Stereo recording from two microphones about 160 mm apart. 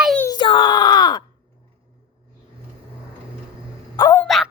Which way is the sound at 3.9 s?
20° left (ahead or behind).